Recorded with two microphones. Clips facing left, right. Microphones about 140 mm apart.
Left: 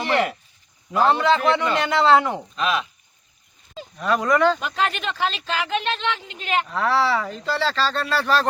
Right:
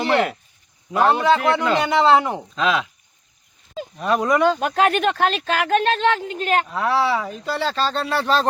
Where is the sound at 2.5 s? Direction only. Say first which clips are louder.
Right 4 dB; 90° right.